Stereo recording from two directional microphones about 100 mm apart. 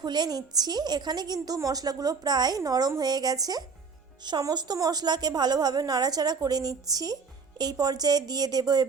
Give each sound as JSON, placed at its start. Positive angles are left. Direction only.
{"t": 0.0, "sound": "a woman's voice", "side_deg": -45}